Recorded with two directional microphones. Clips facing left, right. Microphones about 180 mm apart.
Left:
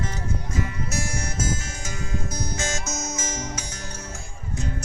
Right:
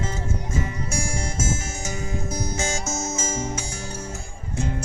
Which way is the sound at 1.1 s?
25° right (ahead or behind).